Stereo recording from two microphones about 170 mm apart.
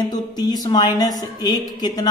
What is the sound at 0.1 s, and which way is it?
Mantra, 25° left (ahead or behind).